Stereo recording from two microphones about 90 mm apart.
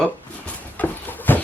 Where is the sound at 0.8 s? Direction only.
20° left (ahead or behind).